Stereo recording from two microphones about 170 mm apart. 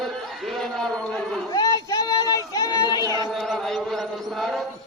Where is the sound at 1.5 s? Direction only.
20° left (ahead or behind).